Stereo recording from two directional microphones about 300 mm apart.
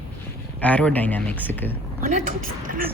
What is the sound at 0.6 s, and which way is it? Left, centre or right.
Speech, centre.